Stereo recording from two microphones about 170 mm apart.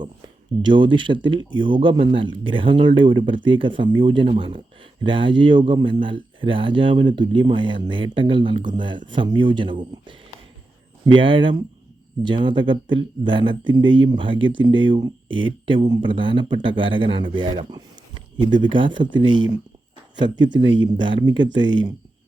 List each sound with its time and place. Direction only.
0.6 s speech: 30° right (ahead or behind)
11.0 s speech: 30° right (ahead or behind)